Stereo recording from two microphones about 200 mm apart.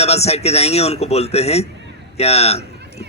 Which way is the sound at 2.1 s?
30° left (ahead or behind).